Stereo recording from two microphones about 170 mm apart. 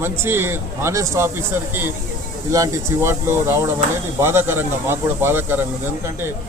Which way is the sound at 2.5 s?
15° right (ahead or behind).